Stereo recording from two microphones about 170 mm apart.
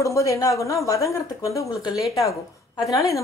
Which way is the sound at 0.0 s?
20° left (ahead or behind).